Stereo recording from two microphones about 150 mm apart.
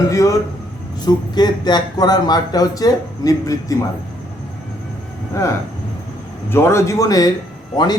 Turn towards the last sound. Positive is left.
turn(degrees=25)  # may be behind; listen again after turning